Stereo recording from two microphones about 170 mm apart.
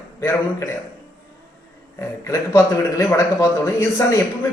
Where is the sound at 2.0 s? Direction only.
15° left (ahead or behind).